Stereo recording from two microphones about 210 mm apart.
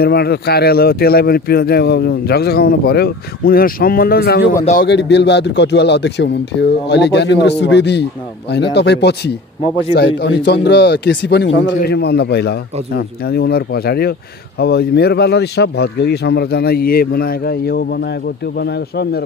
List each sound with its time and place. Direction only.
0.0 s a man's voice: 50° left (ahead or behind)